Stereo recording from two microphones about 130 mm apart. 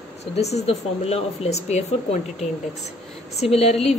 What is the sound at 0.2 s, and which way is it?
Speech, 55° left (ahead or behind).